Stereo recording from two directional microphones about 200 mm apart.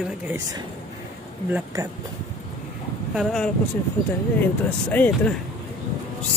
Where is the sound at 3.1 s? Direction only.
5° left (ahead or behind).